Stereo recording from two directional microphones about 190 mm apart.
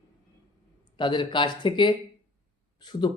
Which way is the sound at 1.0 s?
25° left (ahead or behind).